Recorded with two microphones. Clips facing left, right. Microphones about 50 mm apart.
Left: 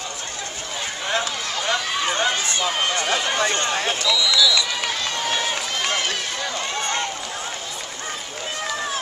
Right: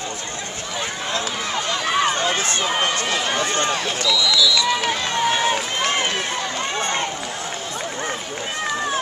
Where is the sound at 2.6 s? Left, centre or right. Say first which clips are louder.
Right 1 dB; right.